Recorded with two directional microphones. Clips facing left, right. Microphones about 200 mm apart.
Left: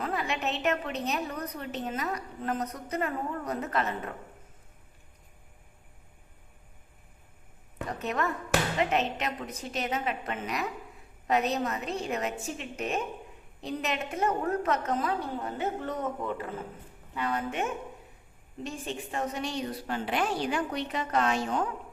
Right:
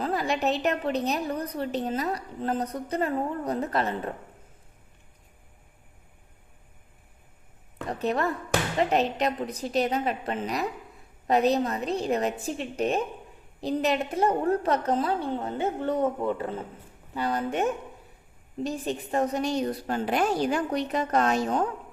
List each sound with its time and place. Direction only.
0.0 s a woman's voice: 35° right (ahead or behind)
7.9 s a woman's voice: 35° right (ahead or behind)